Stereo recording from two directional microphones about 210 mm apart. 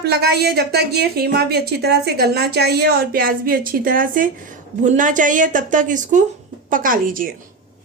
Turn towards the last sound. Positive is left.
turn(degrees=-40)  # may be behind; listen again after turning